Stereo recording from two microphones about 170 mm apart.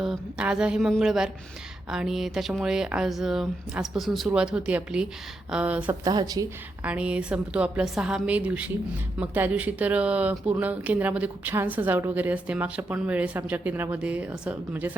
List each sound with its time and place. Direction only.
0.0 s speech: 5° right (ahead or behind)
6.1 s a woman's voice: 20° right (ahead or behind)
6.8 s speech: 5° right (ahead or behind)